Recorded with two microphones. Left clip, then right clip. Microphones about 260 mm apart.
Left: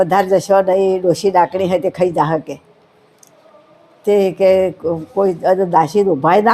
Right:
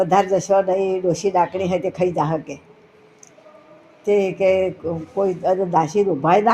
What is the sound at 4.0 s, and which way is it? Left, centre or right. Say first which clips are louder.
Speech: left 5 dB; left.